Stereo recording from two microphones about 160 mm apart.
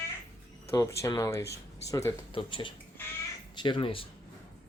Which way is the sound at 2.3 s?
30° left (ahead or behind).